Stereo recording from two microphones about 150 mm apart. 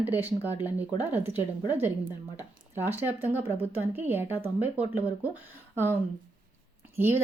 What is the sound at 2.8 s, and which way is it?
Speech, 15° right (ahead or behind).